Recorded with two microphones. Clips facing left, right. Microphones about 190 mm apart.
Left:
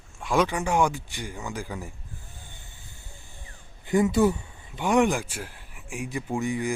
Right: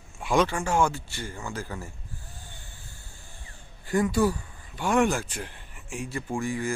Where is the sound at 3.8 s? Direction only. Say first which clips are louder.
Left 3 dB; 20° left (ahead or behind).